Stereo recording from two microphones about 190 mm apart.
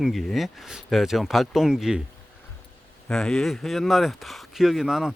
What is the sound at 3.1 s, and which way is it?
Speech, 5° left (ahead or behind).